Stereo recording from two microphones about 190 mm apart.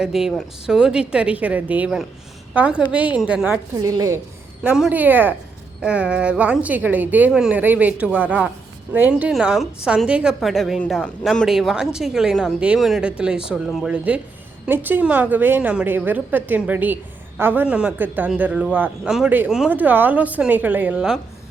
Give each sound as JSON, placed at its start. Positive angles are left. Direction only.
{"t": 0.0, "sound": "a woman's voice", "side_deg": 0}
{"t": 3.8, "sound": "a woman's voice", "side_deg": -20}
{"t": 4.6, "sound": "a woman's voice", "side_deg": -5}